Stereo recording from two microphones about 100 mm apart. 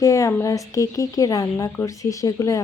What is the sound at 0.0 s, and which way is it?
Speech, 30° left (ahead or behind).